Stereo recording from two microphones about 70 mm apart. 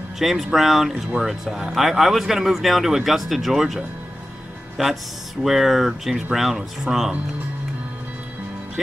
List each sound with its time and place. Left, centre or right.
0.2 s speech: centre